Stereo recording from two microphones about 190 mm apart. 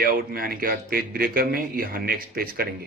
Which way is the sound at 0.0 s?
50° right (ahead or behind).